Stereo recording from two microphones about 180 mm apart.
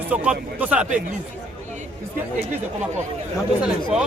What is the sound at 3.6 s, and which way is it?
Speech, 5° right (ahead or behind).